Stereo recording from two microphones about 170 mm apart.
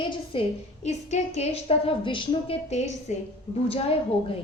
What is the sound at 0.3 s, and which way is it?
A woman's voice, 30° left (ahead or behind).